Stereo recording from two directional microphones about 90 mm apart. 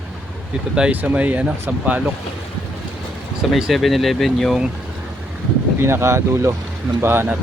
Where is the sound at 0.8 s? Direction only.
15° right (ahead or behind).